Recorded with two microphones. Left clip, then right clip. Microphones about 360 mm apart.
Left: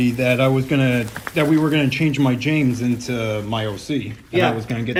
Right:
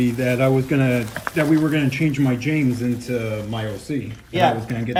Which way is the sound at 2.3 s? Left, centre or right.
Left.